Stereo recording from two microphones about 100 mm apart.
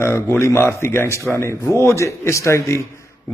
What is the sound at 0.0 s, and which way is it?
Speech, 25° left (ahead or behind).